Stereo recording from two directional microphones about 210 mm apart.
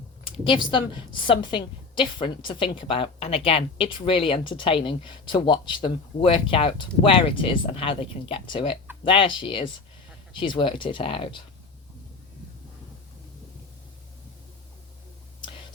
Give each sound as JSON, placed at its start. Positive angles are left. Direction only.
{"t": 0.3, "sound": "a woman's voice", "side_deg": 25}